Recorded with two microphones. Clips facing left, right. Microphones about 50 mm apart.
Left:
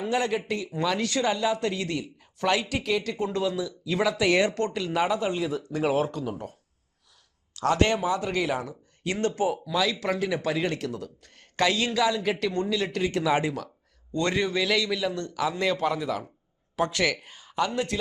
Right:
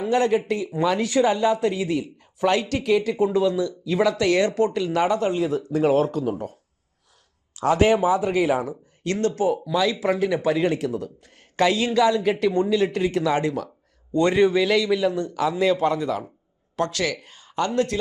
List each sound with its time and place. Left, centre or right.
0.0 s speech: centre
4.3 s speech: centre
4.5 s speech: centre
9.2 s speech: centre
9.5 s speech: centre
14.1 s speech: centre
16.9 s speech: left
17.2 s speech: centre